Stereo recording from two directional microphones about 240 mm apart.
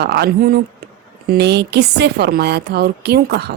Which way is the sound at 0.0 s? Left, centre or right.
Right.